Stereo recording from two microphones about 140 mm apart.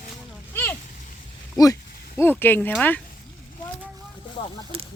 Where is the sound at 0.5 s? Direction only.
15° left (ahead or behind).